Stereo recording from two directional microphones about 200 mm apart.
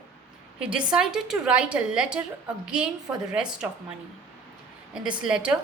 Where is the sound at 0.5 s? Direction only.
5° right (ahead or behind).